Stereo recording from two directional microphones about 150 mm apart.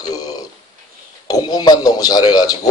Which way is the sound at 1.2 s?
30° left (ahead or behind).